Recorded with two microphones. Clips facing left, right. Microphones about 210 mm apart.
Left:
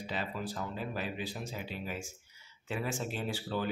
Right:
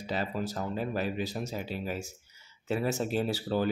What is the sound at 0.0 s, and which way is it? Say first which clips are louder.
Speech: right 5 dB; 40° right (ahead or behind).